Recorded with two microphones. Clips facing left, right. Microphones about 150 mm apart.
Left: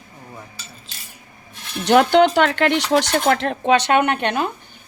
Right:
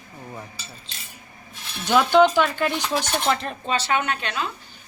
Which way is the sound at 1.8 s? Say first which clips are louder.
Left 3 dB; 65° left (ahead or behind).